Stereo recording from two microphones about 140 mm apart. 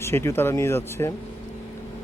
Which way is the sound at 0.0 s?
15° left (ahead or behind).